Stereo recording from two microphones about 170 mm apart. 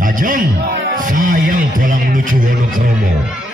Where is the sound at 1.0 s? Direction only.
55° right (ahead or behind).